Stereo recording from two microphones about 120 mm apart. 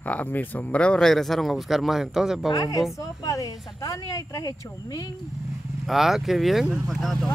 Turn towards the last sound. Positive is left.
turn(degrees=0)  # may be behind; listen again after turning